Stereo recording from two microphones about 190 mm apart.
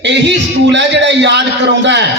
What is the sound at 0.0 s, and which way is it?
A man's voice, 65° right (ahead or behind).